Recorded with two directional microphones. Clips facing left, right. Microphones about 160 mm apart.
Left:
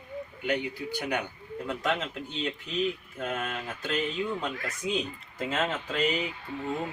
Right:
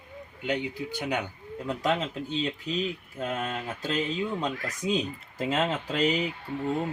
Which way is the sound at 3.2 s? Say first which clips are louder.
Right 2 dB; 35° right (ahead or behind).